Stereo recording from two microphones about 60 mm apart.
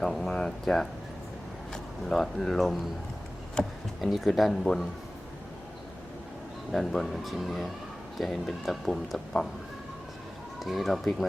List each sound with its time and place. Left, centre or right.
0.0 s speech: centre
6.7 s speech: centre
10.6 s speech: centre